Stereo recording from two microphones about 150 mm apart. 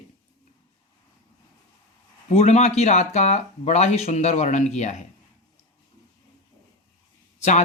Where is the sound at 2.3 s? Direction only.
50° left (ahead or behind).